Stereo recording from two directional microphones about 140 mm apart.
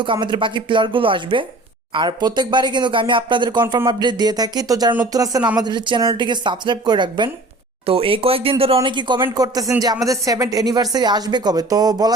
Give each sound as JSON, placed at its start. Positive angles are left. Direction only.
{"t": 0.0, "sound": "speech", "side_deg": -35}